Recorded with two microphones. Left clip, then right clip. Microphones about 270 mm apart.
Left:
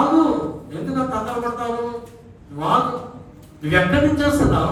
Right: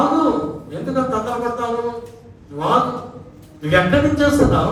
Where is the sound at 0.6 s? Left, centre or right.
Centre.